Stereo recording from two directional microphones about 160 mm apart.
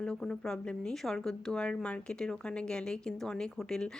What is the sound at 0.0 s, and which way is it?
A woman's voice, 5° left (ahead or behind).